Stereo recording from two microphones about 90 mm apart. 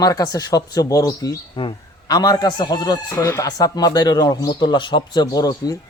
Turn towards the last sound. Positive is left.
turn(degrees=45)  # may be behind; listen again after turning